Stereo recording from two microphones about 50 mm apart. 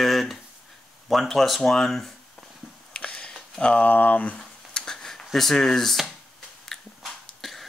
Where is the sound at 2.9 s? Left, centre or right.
Left.